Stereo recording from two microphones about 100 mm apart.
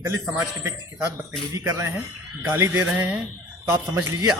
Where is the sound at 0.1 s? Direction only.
30° right (ahead or behind).